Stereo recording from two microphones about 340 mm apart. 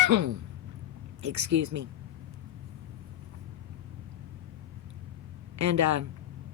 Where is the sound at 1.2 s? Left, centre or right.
Right.